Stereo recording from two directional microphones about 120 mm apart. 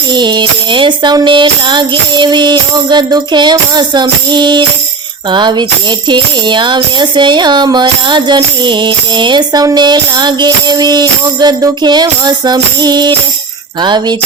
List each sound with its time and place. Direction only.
0.1 s tambourine: 40° right (ahead or behind)